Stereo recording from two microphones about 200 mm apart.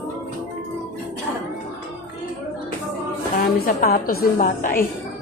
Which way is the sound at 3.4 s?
45° left (ahead or behind).